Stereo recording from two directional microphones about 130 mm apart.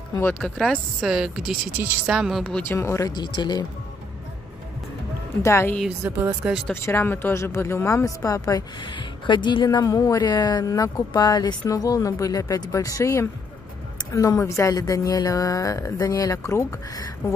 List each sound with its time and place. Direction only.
0.1 s speech: 15° left (ahead or behind)
0.4 s speech: centre (ahead or behind)
2.6 s speech: 20° left (ahead or behind)
3.1 s speech: 35° left (ahead or behind)
5.4 s speech: 20° left (ahead or behind)
6.0 s speech: 15° right (ahead or behind)
6.7 s speech: 20° left (ahead or behind)
8.8 s speech: 40° left (ahead or behind)